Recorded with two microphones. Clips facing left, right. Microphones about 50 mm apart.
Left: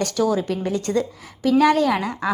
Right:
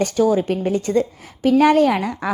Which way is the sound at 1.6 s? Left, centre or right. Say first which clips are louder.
Right 3 dB; right.